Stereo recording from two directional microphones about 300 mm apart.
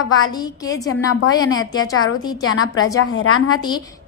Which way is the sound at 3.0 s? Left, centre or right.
Left.